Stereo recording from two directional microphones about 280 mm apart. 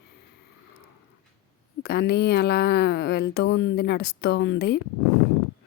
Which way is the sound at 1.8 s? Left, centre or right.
Left.